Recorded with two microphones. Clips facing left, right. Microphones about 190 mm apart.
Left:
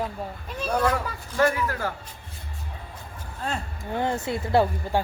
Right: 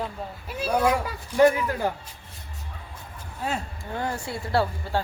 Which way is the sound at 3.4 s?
5° right (ahead or behind).